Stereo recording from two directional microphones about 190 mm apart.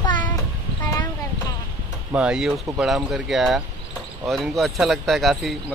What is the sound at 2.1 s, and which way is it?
Speech, 5° right (ahead or behind).